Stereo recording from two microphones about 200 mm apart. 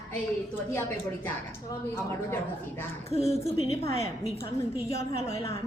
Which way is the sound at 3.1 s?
30° left (ahead or behind).